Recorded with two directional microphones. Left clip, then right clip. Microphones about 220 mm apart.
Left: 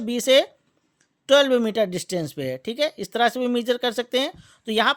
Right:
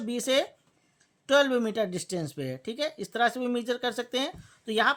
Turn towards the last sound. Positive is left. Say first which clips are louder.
# left 4 dB
turn(degrees=35)  # may be behind; listen again after turning